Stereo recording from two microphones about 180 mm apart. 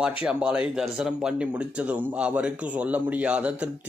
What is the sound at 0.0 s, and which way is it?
Speech, 5° right (ahead or behind).